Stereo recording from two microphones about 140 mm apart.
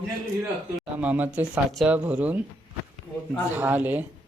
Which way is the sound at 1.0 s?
10° right (ahead or behind).